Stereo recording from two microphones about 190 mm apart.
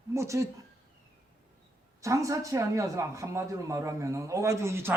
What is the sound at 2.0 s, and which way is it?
A man's voice, 15° right (ahead or behind).